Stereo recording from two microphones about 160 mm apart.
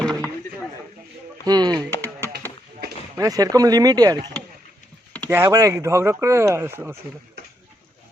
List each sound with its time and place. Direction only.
0.0 s chop: 5° left (ahead or behind)
1.5 s speech: 25° right (ahead or behind)
1.9 s a sound: 15° left (ahead or behind)
3.2 s speech: 20° right (ahead or behind)
5.3 s speech: 15° right (ahead or behind)